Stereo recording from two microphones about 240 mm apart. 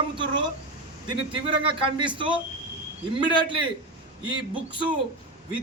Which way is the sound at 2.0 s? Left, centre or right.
Centre.